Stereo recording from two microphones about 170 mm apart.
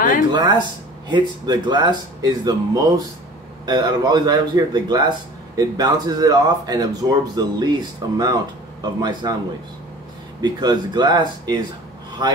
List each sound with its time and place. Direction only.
0.3 s speech: 25° right (ahead or behind)
10.4 s speech: 25° right (ahead or behind)